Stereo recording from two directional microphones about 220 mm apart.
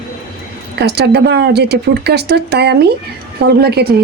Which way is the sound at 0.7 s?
50° right (ahead or behind).